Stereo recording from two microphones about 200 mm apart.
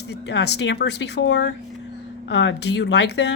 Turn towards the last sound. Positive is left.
turn(degrees=60)  # may be behind; listen again after turning